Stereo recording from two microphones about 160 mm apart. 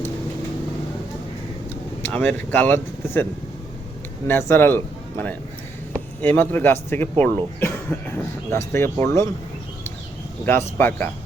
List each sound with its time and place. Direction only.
2.0 s speech: 10° left (ahead or behind)
4.3 s speech: 15° left (ahead or behind)
10.4 s speech: 15° left (ahead or behind)